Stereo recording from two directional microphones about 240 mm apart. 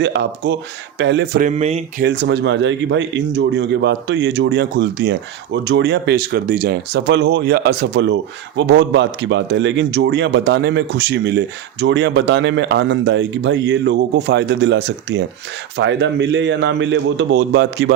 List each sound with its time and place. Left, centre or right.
0.0 s speech: right
1.4 s a sound: right
2.0 s speech: right